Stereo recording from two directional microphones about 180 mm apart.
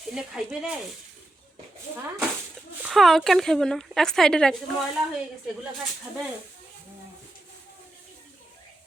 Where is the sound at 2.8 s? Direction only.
Centre (ahead or behind).